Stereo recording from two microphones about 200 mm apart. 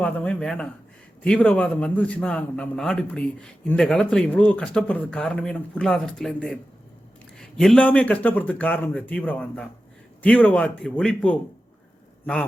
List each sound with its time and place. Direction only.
0.0 s a man's voice: 5° left (ahead or behind)